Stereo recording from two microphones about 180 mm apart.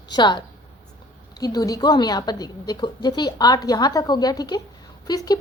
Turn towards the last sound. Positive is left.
turn(degrees=20)  # may be behind; listen again after turning